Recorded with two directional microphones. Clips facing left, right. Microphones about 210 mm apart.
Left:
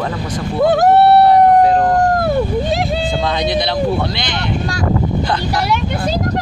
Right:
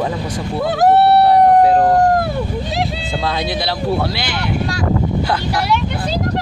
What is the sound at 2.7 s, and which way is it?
Speech, 50° left (ahead or behind).